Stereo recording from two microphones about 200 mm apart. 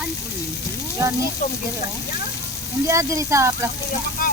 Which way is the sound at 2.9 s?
15° right (ahead or behind).